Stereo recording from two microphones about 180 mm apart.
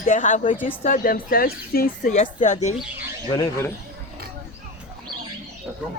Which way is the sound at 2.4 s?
40° left (ahead or behind).